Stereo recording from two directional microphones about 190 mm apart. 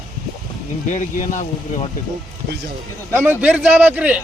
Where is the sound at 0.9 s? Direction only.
40° left (ahead or behind).